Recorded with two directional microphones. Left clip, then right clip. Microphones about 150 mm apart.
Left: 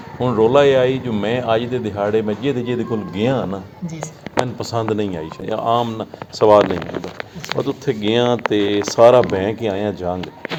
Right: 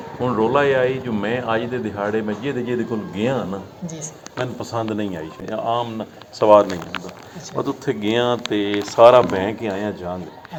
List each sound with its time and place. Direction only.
0.2 s a man's voice: 20° left (ahead or behind)
4.7 s speech: 20° left (ahead or behind)
7.6 s speech: 5° right (ahead or behind)
8.1 s a man's voice: 10° left (ahead or behind)